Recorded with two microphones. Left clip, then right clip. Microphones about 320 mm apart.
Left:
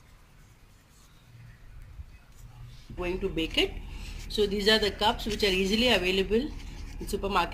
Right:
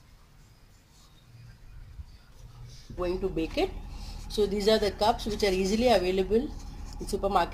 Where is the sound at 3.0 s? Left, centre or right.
Centre.